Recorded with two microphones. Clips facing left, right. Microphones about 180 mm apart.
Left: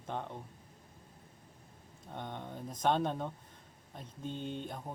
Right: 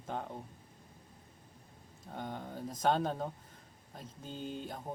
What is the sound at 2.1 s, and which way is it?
Speech, 5° right (ahead or behind).